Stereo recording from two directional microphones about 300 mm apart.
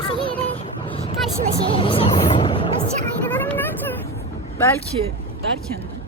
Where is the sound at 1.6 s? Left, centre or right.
Centre.